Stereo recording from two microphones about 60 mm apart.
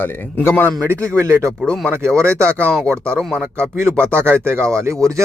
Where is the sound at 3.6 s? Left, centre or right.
Right.